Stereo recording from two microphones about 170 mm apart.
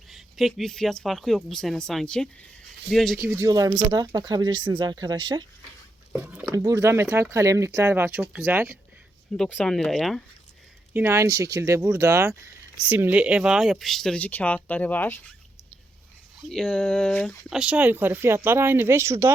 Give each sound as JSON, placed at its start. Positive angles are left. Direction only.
{"t": 0.1, "sound": "speech", "side_deg": 0}
{"t": 3.2, "sound": "speech", "side_deg": -15}
{"t": 6.1, "sound": "speech", "side_deg": -10}
{"t": 9.4, "sound": "speech", "side_deg": 5}
{"t": 10.9, "sound": "speech", "side_deg": -15}
{"t": 16.5, "sound": "speech", "side_deg": 5}